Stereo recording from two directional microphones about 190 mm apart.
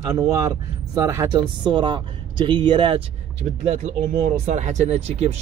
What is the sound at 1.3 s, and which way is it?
A man's voice, 25° right (ahead or behind).